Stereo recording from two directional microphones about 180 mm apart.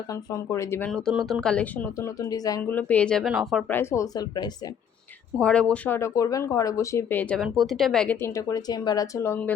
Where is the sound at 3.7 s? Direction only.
15° left (ahead or behind).